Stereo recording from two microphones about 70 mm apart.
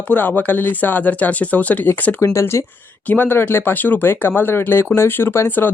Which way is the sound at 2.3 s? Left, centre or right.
Left.